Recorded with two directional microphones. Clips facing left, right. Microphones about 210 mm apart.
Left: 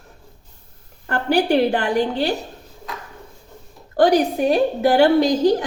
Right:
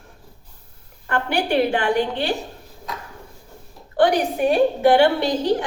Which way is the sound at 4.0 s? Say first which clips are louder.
Left 2 dB; 40° left (ahead or behind).